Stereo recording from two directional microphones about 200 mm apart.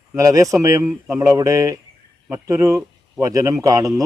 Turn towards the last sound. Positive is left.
turn(degrees=-15)  # may be behind; listen again after turning